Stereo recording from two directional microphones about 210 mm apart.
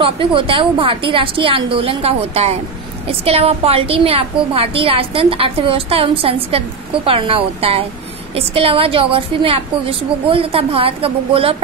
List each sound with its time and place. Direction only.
0.0 s a woman's voice: 25° right (ahead or behind)